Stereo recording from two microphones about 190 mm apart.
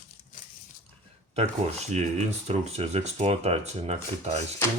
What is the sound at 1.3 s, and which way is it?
Speech, 35° right (ahead or behind).